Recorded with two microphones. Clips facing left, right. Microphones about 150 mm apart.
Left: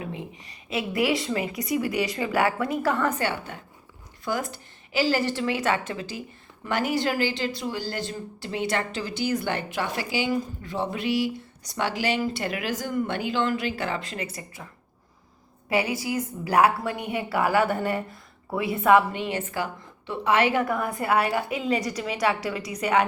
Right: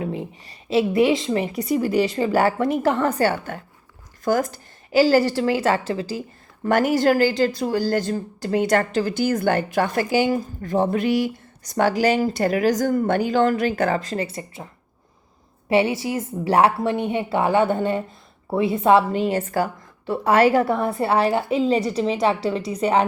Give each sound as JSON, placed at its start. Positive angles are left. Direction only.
{"t": 0.0, "sound": "a woman's voice", "side_deg": -35}
{"t": 6.7, "sound": "speech", "side_deg": -45}
{"t": 15.7, "sound": "speech", "side_deg": -25}